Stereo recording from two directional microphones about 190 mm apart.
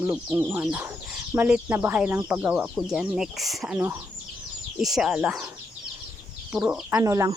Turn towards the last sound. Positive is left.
turn(degrees=-15)  # may be behind; listen again after turning